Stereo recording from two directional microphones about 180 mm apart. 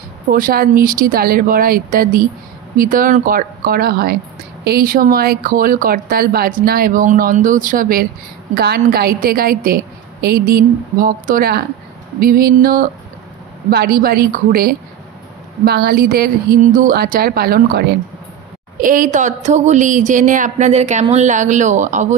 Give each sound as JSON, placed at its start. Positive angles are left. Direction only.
{"t": 0.3, "sound": "speech", "side_deg": -50}
{"t": 18.8, "sound": "speech", "side_deg": -45}